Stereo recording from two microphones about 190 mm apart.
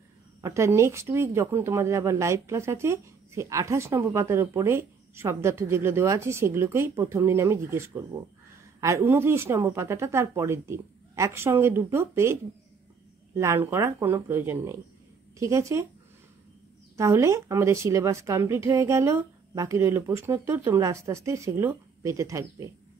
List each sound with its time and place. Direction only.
0.4 s speech: 15° right (ahead or behind)
16.9 s speech: 15° right (ahead or behind)